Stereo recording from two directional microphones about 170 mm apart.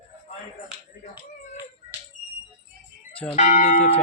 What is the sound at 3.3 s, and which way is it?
Speech, 45° left (ahead or behind).